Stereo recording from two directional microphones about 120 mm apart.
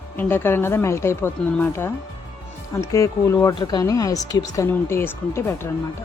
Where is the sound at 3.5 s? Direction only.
35° left (ahead or behind).